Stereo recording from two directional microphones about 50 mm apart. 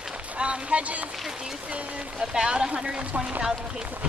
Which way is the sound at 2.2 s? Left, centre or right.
Centre.